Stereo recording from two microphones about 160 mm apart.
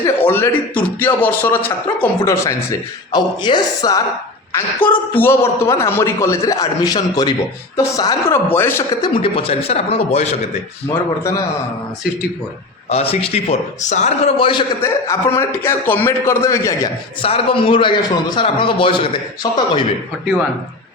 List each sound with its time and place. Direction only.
0.0 s a man's voice: 15° left (ahead or behind)
4.5 s a man's voice: 10° left (ahead or behind)
9.0 s speech: 30° left (ahead or behind)
11.2 s speech: 20° left (ahead or behind)
12.9 s speech: 35° left (ahead or behind)
14.3 s speech: 35° left (ahead or behind)
14.8 s a man's voice: 20° left (ahead or behind)
17.2 s speech: 35° left (ahead or behind)